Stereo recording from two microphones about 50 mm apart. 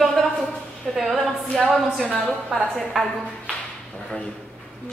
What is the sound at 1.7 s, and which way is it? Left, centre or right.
Speech, centre.